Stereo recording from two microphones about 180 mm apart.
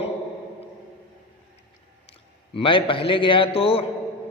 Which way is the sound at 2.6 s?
30° left (ahead or behind).